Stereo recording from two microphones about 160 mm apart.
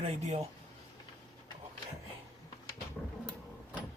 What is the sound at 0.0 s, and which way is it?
Speech, 40° right (ahead or behind).